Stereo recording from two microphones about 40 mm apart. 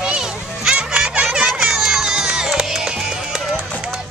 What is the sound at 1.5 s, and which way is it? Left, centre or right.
Music, centre.